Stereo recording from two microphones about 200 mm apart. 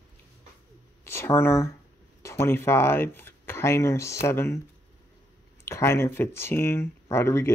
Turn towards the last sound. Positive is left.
turn(degrees=15)  # may be behind; listen again after turning